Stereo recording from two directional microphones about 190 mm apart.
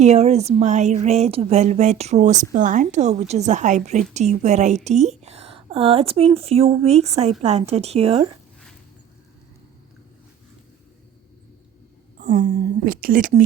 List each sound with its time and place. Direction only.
0.0 s speech: 35° right (ahead or behind)
12.2 s speech: 45° right (ahead or behind)